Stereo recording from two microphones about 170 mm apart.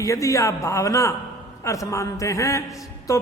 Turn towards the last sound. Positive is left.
turn(degrees=20)  # may be behind; listen again after turning